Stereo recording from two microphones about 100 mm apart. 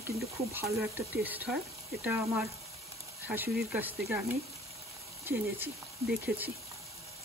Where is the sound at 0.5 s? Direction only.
25° right (ahead or behind).